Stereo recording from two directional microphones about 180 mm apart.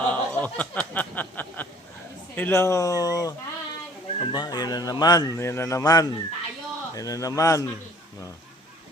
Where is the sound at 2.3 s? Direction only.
10° left (ahead or behind).